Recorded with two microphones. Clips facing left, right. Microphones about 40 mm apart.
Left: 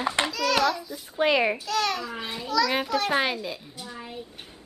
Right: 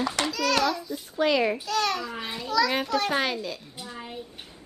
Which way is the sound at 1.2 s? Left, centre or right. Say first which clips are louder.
Left 1 dB; left.